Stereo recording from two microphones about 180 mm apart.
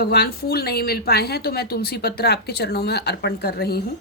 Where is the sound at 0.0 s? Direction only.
60° left (ahead or behind).